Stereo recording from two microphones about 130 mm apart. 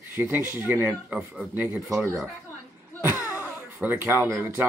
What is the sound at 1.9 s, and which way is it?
Speech, centre (ahead or behind).